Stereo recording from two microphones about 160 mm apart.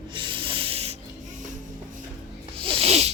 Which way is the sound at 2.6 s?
40° right (ahead or behind).